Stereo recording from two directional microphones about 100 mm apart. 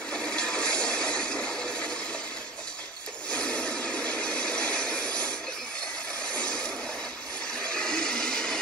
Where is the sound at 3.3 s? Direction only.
10° left (ahead or behind).